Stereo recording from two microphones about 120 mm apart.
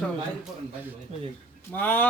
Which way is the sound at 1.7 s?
15° left (ahead or behind).